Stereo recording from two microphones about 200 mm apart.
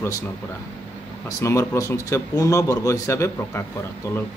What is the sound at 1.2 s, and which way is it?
A man's voice, 15° left (ahead or behind).